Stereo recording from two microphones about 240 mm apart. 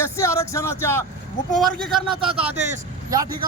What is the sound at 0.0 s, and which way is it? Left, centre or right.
A man's voice, centre.